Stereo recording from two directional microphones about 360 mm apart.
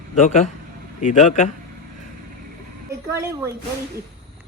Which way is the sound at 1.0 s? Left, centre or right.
Left.